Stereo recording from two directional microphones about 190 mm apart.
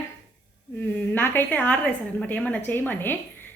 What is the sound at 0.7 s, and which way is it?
A woman's voice, 10° left (ahead or behind).